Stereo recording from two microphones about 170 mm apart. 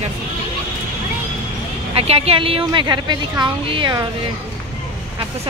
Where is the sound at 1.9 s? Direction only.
35° right (ahead or behind).